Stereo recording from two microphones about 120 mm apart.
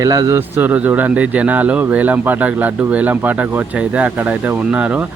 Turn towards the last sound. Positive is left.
turn(degrees=-10)  # may be behind; listen again after turning